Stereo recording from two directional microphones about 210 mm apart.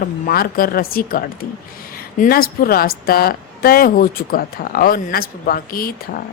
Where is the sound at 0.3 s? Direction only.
45° left (ahead or behind).